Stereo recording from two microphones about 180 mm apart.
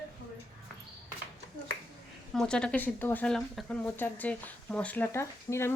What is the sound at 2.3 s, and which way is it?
Speech, 5° left (ahead or behind).